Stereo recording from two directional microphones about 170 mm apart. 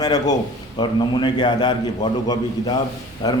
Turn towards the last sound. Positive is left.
turn(degrees=25)  # may be behind; listen again after turning